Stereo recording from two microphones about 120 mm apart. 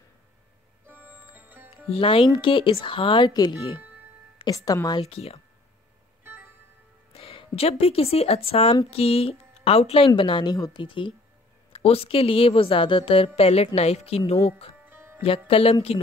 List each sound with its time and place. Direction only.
0.8 s music: 15° right (ahead or behind)
1.9 s a woman's voice: 50° left (ahead or behind); by 5.0 s 30° left (ahead or behind)
5.1 s speech: 55° left (ahead or behind)
6.2 s music: 20° right (ahead or behind)
7.1 s a woman's voice: 50° left (ahead or behind)
11.7 s a woman's voice: 55° left (ahead or behind)
14.9 s music: 20° right (ahead or behind)
15.2 s a woman's voice: 50° left (ahead or behind)